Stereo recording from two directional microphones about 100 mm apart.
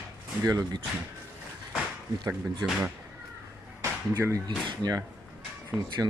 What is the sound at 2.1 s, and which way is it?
Speech, 40° right (ahead or behind).